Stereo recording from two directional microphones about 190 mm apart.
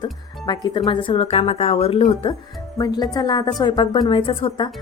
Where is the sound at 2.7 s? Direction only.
20° left (ahead or behind).